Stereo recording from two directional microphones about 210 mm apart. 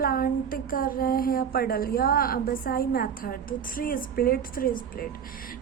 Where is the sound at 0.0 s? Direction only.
45° left (ahead or behind).